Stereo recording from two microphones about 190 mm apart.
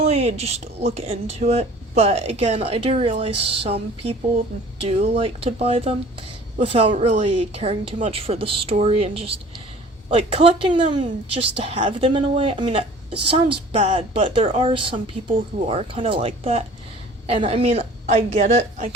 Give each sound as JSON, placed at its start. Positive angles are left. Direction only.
{"t": 0.0, "sound": "speech", "side_deg": -35}